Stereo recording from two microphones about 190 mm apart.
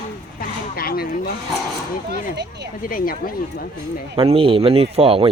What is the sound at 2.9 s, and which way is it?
Speech, 50° left (ahead or behind).